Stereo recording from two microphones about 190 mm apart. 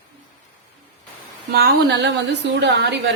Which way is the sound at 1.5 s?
60° right (ahead or behind).